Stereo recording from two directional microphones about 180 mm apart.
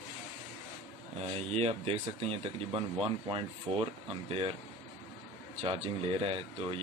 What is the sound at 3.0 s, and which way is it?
Speech, 30° right (ahead or behind).